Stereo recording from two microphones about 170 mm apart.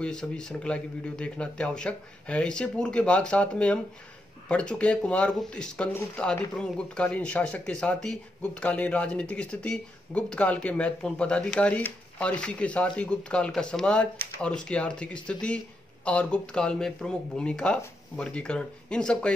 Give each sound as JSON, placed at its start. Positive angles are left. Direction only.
{"t": 0.0, "sound": "a man's voice", "side_deg": 5}